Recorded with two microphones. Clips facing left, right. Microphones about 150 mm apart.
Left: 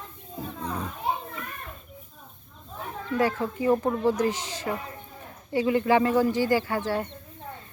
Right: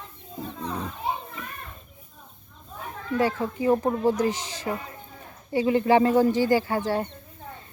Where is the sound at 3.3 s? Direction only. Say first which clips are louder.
Right 1 dB; 20° right (ahead or behind).